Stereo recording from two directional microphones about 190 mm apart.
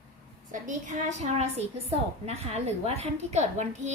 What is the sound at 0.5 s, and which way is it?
Speech, 40° right (ahead or behind).